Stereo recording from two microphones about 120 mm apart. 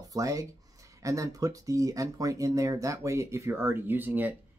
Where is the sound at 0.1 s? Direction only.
30° right (ahead or behind).